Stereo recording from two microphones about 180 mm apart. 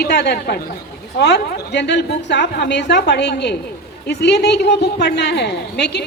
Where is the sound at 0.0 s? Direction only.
65° left (ahead or behind).